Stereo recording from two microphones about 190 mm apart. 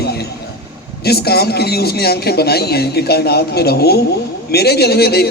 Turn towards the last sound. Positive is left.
turn(degrees=55)  # may be behind; listen again after turning